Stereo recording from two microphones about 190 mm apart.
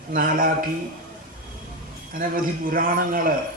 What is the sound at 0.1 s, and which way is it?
Speech, 50° right (ahead or behind).